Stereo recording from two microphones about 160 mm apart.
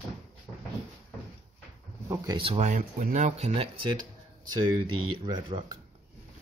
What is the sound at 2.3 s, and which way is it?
Speech, 40° right (ahead or behind).